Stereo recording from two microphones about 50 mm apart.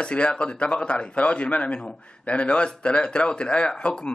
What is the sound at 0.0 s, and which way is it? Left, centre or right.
A man's voice, left.